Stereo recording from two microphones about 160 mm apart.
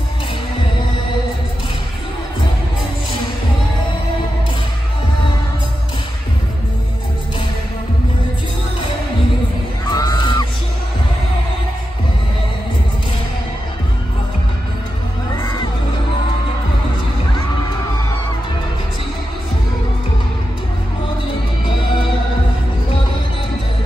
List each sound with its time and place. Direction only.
9.8 s music: 25° left (ahead or behind)